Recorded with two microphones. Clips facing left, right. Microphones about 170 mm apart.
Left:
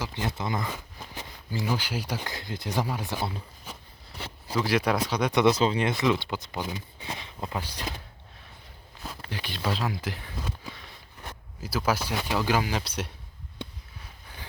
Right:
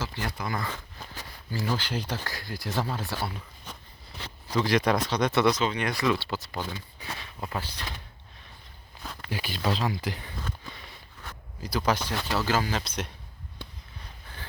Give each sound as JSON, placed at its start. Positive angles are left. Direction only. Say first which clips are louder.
{"t": 0.0, "sound": "speech", "louder": "left 2 dB", "side_deg": 20}
{"t": 3.7, "sound": "a sound", "louder": "even", "side_deg": 10}
{"t": 4.4, "sound": "speech", "louder": "right 1 dB", "side_deg": 10}
{"t": 5.5, "sound": "speech", "louder": "left 3 dB", "side_deg": 30}
{"t": 9.3, "sound": "speech", "louder": "right 2 dB", "side_deg": -5}
{"t": 10.4, "sound": "a sound", "louder": "left 1 dB", "side_deg": 0}
{"t": 11.6, "sound": "speech", "louder": "even", "side_deg": 5}